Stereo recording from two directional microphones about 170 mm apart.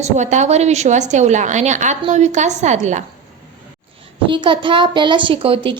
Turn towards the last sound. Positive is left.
turn(degrees=-30)  # may be behind; listen again after turning